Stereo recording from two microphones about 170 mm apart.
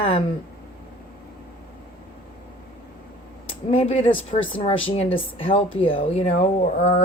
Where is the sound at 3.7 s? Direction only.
35° left (ahead or behind).